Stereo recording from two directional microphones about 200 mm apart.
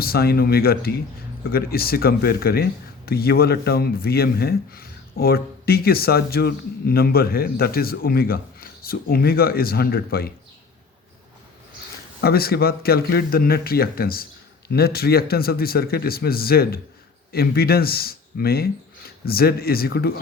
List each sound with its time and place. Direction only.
0.0 s speech: 50° left (ahead or behind)
12.2 s speech: 50° left (ahead or behind)